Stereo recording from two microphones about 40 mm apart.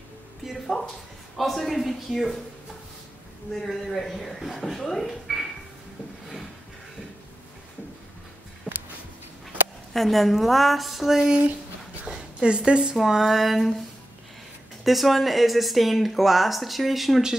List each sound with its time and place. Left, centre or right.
0.5 s a sound: centre
1.4 s speech: centre
3.5 s speech: centre
9.9 s speech: centre
11.2 s a woman's voice: right
12.9 s speech: centre
14.9 s speech: centre